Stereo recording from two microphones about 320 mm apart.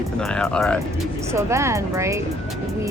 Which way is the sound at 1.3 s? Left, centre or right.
Centre.